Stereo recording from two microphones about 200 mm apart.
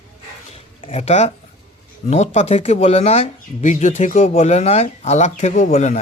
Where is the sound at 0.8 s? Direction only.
30° left (ahead or behind).